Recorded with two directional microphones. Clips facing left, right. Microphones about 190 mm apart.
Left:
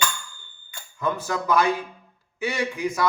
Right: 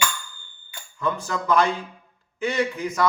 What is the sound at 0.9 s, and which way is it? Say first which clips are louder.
Mantra: even; 10° left (ahead or behind).